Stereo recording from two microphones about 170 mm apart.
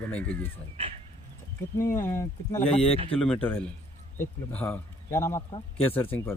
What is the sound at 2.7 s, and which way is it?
Speech, 35° left (ahead or behind).